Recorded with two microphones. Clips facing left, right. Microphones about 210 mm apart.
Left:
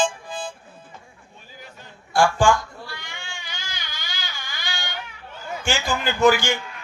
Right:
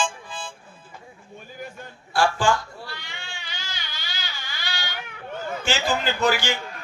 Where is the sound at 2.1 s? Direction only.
45° left (ahead or behind).